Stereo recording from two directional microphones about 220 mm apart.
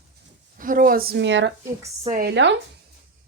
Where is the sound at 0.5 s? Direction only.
40° right (ahead or behind).